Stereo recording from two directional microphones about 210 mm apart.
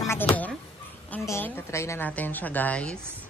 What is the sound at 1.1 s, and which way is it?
A woman's voice, 10° left (ahead or behind).